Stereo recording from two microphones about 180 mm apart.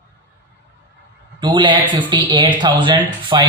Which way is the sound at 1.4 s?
25° right (ahead or behind).